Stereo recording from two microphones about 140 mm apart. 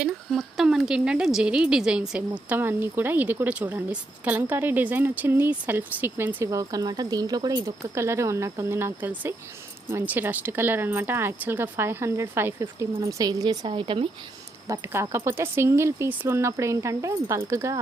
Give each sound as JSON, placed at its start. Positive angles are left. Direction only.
{"t": 0.0, "sound": "speech", "side_deg": 0}
{"t": 14.7, "sound": "speech", "side_deg": -20}